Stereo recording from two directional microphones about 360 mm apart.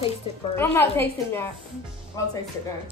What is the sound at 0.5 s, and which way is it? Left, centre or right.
Speech, centre.